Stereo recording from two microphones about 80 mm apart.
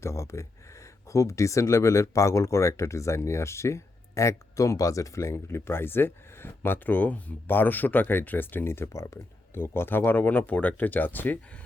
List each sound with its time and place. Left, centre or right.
0.0 s speech: left